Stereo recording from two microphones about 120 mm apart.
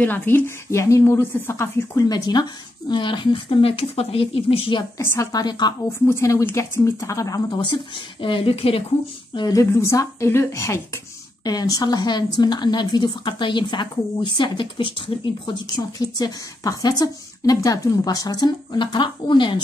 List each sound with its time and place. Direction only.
0.0 s a woman's voice: 15° left (ahead or behind); by 4.8 s 45° left (ahead or behind)
4.9 s speech: 25° left (ahead or behind)
5.9 s speech: 20° left (ahead or behind); by 8.8 s 50° left (ahead or behind)
9.3 s speech: 35° left (ahead or behind)